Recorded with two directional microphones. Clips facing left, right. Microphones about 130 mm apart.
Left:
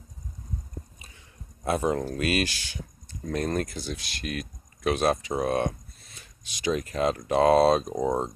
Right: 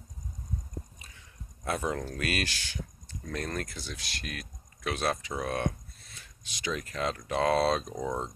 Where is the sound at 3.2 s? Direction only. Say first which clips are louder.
Left 7 dB; 25° left (ahead or behind).